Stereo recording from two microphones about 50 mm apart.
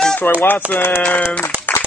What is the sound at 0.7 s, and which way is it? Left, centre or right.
Speech, left.